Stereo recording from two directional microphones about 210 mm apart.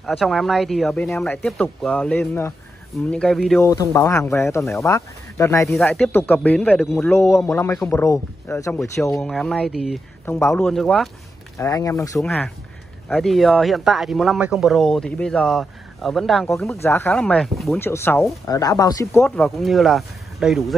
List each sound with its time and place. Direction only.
0.0 s speech: centre (ahead or behind)
3.6 s speech: 15° left (ahead or behind)
5.7 s speech: centre (ahead or behind)
9.2 s speech: centre (ahead or behind)
10.2 s speech: 10° left (ahead or behind)
11.5 s speech: 15° left (ahead or behind)
12.2 s speech: 5° left (ahead or behind)
19.2 s speech: centre (ahead or behind)